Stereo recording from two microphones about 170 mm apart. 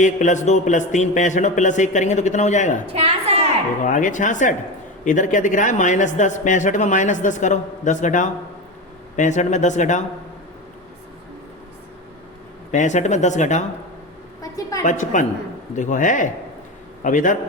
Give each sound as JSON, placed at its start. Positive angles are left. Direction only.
{"t": 0.0, "sound": "speech", "side_deg": 45}
{"t": 2.8, "sound": "a woman's voice", "side_deg": -35}
{"t": 3.8, "sound": "speech", "side_deg": 50}
{"t": 12.7, "sound": "speech", "side_deg": 45}
{"t": 14.8, "sound": "a man's voice", "side_deg": 45}